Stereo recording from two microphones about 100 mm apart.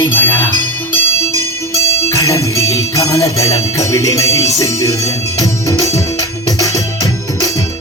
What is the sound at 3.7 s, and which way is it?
Music, 30° left (ahead or behind).